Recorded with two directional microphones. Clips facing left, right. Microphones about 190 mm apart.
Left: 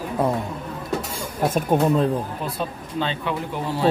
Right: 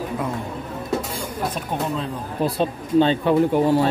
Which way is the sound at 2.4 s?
35° right (ahead or behind).